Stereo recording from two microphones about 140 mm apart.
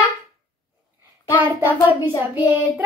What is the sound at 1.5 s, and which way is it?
Speech, 15° right (ahead or behind).